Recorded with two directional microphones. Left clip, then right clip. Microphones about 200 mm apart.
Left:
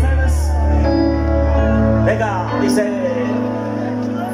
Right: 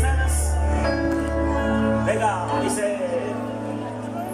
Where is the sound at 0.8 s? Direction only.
25° left (ahead or behind).